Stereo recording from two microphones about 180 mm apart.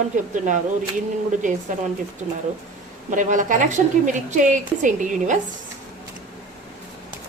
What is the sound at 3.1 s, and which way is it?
A woman's voice, 45° right (ahead or behind).